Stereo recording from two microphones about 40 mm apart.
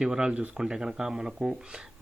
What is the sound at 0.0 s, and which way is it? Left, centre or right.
Speech, right.